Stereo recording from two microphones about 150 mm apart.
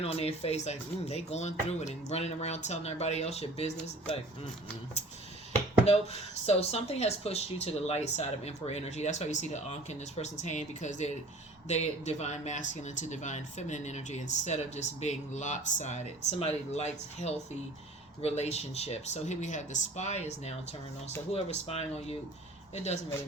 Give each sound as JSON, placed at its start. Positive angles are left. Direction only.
{"t": 0.0, "sound": "speech", "side_deg": 40}
{"t": 5.8, "sound": "speech", "side_deg": 45}